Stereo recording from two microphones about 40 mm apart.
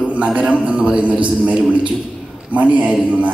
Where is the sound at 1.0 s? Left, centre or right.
Right.